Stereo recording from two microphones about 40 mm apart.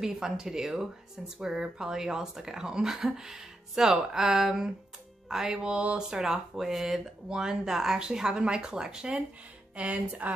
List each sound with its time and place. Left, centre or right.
0.0 s speech: centre
5.7 s speech: right
5.9 s speech: centre
9.8 s speech: right